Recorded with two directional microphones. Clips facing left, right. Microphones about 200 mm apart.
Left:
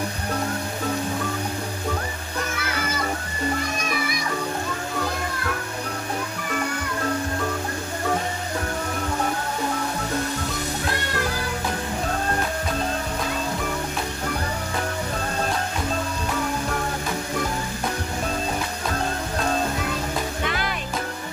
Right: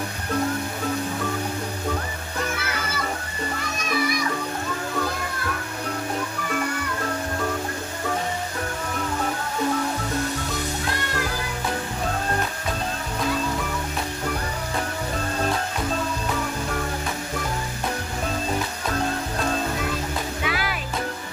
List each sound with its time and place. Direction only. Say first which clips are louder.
20.4 s music: even; 5° right (ahead or behind)